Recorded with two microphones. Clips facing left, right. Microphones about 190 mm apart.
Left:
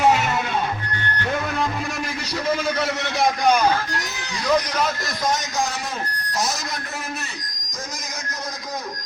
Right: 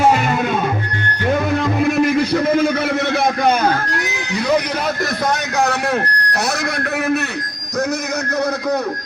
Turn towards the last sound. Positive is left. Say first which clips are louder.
# right 12 dB
turn(degrees=-65)  # may be behind; listen again after turning